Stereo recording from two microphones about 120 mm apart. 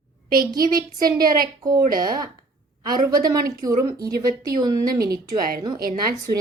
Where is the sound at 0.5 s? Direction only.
30° right (ahead or behind).